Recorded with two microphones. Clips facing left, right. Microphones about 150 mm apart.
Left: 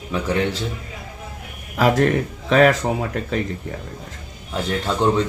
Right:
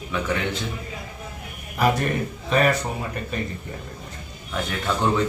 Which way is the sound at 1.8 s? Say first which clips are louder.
Left 5 dB; 90° left.